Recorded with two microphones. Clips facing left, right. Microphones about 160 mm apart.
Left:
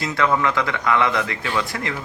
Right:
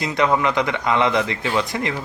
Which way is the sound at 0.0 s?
20° right (ahead or behind).